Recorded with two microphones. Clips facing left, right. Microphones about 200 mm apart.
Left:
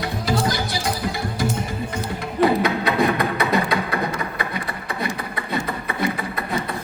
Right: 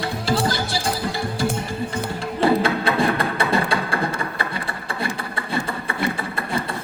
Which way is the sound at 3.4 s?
30° right (ahead or behind).